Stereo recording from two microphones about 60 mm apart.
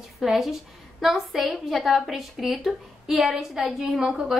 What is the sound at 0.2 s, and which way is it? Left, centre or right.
A woman's voice, centre.